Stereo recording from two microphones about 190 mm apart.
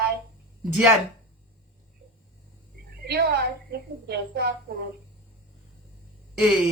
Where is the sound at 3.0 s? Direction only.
55° right (ahead or behind).